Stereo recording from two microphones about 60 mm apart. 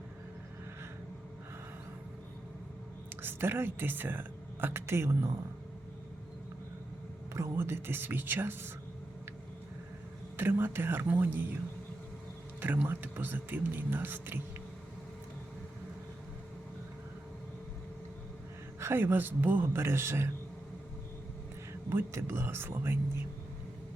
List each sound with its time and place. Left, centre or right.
3.2 s speech: right
7.5 s speech: right
10.3 s speech: right
12.5 s speech: right
18.8 s speech: right
21.7 s speech: right